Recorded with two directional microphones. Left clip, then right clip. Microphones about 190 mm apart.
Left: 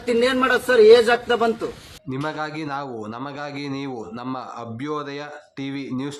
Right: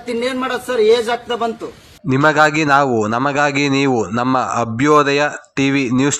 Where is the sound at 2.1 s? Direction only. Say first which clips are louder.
Right 15 dB; 35° right (ahead or behind).